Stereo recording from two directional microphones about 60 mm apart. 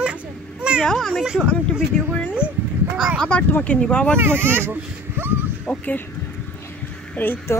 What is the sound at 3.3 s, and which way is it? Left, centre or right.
Speech, left.